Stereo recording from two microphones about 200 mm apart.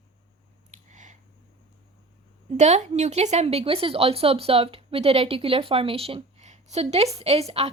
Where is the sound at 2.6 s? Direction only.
35° right (ahead or behind).